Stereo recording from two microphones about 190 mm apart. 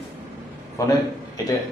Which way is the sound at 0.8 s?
15° left (ahead or behind).